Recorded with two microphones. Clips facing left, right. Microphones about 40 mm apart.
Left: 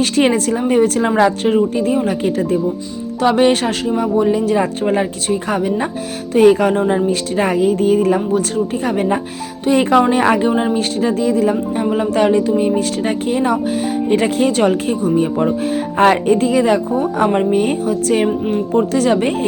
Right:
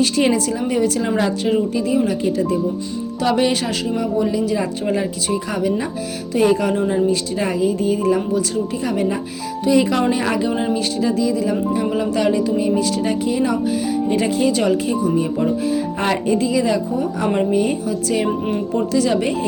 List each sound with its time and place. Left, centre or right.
0.0 s speech: left
2.0 s speech: left
3.2 s speech: left
3.5 s speech: left
3.8 s speech: left
6.3 s speech: left
14.1 s speech: left
15.1 s speech: left
16.0 s speech: left
18.3 s speech: centre
18.9 s speech: left